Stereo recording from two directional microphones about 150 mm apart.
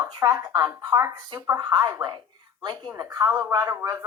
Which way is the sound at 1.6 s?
30° right (ahead or behind).